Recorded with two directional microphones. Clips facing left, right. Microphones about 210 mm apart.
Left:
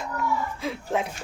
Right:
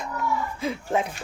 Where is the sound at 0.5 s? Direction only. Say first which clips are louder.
Right 2 dB; centre (ahead or behind).